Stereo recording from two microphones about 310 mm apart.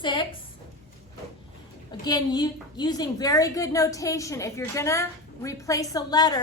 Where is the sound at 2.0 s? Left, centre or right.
Centre.